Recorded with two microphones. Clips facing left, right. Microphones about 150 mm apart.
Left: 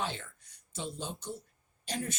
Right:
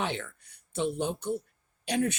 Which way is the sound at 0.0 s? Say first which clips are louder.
Right 5 dB; 65° right (ahead or behind).